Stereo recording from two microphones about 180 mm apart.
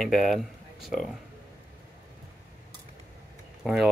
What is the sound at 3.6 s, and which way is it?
Speech, centre (ahead or behind).